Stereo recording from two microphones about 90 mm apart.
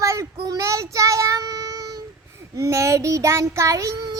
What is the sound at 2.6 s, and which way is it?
A child's voice, 35° right (ahead or behind).